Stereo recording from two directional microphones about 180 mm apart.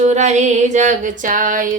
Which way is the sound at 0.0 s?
40° right (ahead or behind).